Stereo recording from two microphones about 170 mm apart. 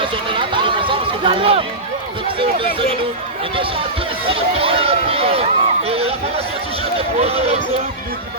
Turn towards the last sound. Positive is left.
turn(degrees=-35)  # may be behind; listen again after turning